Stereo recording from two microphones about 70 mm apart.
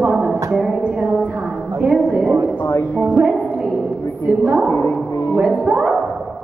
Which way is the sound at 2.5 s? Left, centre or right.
Left.